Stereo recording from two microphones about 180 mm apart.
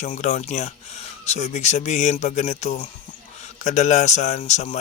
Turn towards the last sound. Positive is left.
turn(degrees=40)  # may be behind; listen again after turning